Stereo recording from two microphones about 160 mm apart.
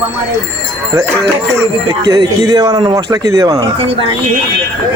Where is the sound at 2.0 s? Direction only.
25° right (ahead or behind).